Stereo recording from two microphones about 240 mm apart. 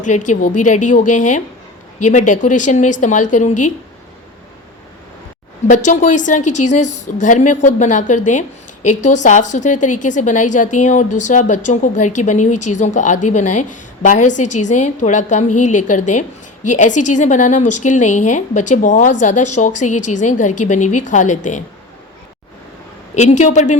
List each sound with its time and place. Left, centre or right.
0.0 s a woman's voice: left
5.6 s a woman's voice: left
23.1 s a woman's voice: left